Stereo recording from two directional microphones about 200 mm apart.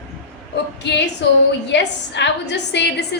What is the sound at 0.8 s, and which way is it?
A woman's voice, 60° left (ahead or behind).